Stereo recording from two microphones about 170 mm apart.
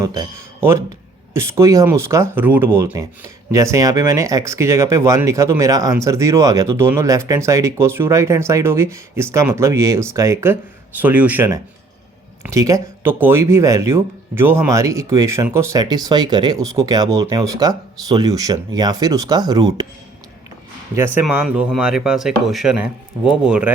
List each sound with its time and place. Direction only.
0.0 s speech: 20° right (ahead or behind)
21.2 s speech: 5° right (ahead or behind)